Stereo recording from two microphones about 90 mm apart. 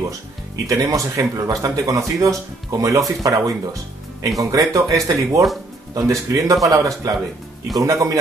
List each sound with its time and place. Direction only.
0.7 s speech: 40° right (ahead or behind)